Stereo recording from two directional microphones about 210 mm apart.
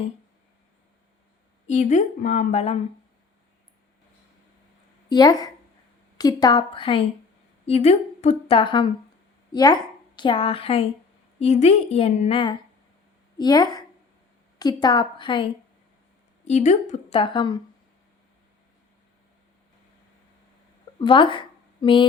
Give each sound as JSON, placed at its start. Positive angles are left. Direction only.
{"t": 1.6, "sound": "a woman's voice", "side_deg": 35}
{"t": 5.0, "sound": "a woman's voice", "side_deg": 20}
{"t": 16.5, "sound": "a woman's voice", "side_deg": 35}
{"t": 21.0, "sound": "speech", "side_deg": 25}